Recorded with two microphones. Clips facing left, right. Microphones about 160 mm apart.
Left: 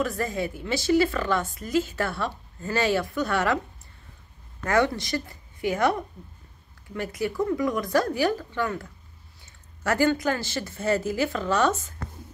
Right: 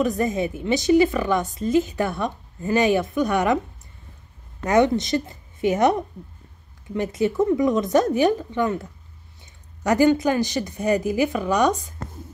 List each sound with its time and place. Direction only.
0.0 s a woman's voice: 20° right (ahead or behind)
4.6 s a woman's voice: 20° right (ahead or behind)
9.8 s a woman's voice: 20° right (ahead or behind)